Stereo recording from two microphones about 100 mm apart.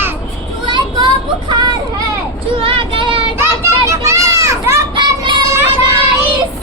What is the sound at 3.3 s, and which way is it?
Children playing, 25° right (ahead or behind).